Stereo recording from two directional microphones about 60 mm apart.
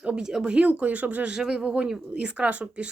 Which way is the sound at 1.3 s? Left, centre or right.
Centre.